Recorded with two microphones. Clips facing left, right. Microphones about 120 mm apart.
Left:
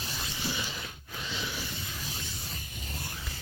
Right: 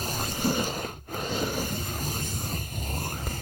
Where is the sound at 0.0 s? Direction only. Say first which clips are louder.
Right 8 dB; 45° right (ahead or behind).